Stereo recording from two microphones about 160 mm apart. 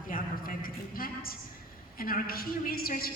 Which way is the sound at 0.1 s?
65° left (ahead or behind).